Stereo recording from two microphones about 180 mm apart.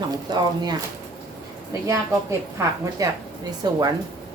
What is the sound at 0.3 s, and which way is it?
Speech, 25° right (ahead or behind).